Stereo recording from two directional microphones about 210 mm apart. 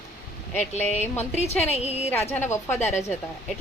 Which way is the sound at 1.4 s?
30° left (ahead or behind).